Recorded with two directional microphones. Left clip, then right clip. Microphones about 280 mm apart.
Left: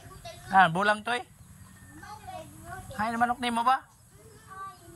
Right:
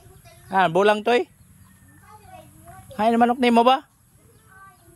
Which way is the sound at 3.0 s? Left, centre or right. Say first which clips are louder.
Right 9 dB; right.